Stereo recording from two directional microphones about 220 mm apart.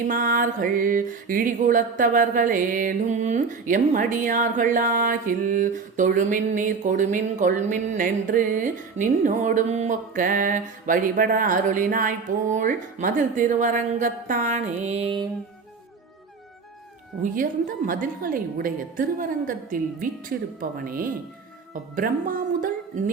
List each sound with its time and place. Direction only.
0.1 s music: 35° right (ahead or behind)
17.2 s music: 35° right (ahead or behind)
21.7 s speech: 40° right (ahead or behind)